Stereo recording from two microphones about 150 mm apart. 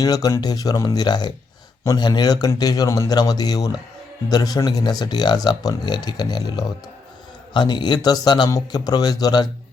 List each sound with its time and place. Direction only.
0.0 s speech: 25° left (ahead or behind)